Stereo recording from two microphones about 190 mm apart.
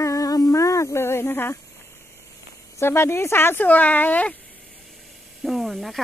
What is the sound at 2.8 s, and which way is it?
Speech, 15° left (ahead or behind).